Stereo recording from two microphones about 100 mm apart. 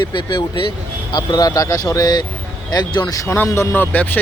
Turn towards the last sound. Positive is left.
turn(degrees=20)  # may be behind; listen again after turning